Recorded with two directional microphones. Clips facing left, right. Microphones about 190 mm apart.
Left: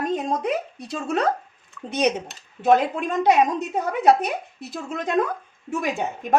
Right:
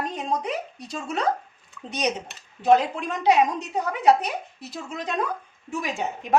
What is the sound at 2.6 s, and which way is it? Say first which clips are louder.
A woman's voice: left 1 dB; 50° left (ahead or behind).